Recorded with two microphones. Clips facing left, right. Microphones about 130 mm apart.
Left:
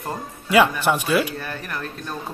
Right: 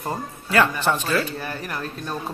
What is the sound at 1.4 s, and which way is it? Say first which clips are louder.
Speech: right 1 dB; 10° right (ahead or behind).